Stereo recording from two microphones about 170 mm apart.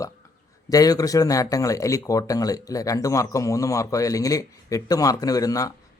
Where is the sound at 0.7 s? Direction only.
20° left (ahead or behind).